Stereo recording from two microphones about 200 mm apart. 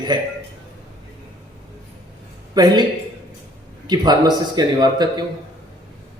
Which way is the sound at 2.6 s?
20° right (ahead or behind).